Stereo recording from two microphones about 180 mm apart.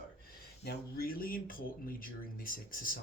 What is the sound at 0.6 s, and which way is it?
Speech, 55° left (ahead or behind).